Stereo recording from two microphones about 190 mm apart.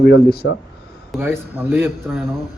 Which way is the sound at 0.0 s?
65° left (ahead or behind).